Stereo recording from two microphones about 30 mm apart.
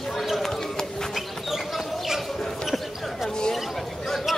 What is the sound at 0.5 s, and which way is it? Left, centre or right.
Run, centre.